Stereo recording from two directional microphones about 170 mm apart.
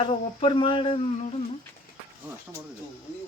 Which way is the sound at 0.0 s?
35° left (ahead or behind).